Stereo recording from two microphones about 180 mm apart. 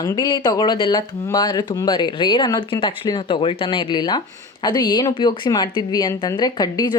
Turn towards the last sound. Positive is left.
turn(degrees=20)  # may be behind; listen again after turning